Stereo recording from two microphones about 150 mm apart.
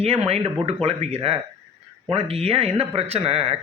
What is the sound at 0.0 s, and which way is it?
A man's voice, 45° right (ahead or behind).